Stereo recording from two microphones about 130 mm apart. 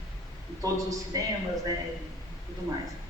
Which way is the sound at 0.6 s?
30° right (ahead or behind).